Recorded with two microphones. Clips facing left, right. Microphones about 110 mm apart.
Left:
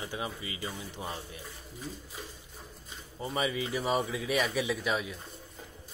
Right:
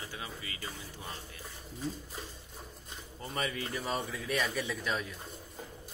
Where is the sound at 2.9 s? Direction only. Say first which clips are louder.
Left 5 dB; 5° left (ahead or behind).